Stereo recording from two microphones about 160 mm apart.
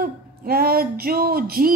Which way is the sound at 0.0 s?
70° right (ahead or behind).